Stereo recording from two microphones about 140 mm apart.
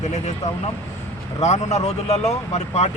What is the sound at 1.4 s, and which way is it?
Speech, 55° left (ahead or behind).